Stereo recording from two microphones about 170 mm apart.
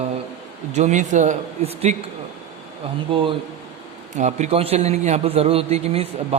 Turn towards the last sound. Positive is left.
turn(degrees=-35)  # may be behind; listen again after turning